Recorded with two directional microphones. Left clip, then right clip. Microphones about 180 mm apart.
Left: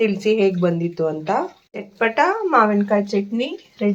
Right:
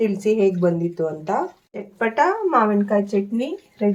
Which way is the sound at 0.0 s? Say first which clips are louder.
Left 1 dB; centre (ahead or behind).